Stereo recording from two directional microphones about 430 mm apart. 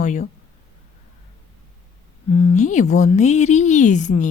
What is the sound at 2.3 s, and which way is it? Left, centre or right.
Speech, centre.